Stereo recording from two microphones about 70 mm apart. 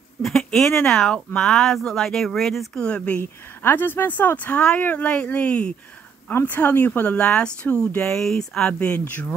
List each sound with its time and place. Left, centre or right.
0.2 s speech: centre
2.8 s speech: centre
3.2 s speech: left
8.0 s speech: centre
8.7 s speech: centre